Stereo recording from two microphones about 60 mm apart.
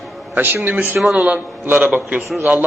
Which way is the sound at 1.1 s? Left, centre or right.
Right.